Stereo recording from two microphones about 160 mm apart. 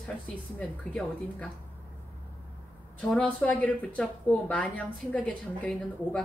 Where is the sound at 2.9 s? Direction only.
10° left (ahead or behind).